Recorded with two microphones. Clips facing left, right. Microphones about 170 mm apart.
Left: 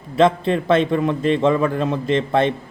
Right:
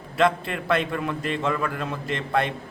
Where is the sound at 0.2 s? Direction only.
20° left (ahead or behind).